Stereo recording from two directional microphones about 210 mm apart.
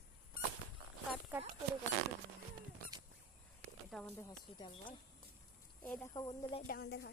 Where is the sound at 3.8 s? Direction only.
Centre (ahead or behind).